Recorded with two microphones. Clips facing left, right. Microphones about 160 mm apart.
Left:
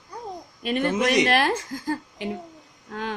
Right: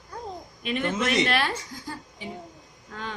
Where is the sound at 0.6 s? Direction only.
40° left (ahead or behind).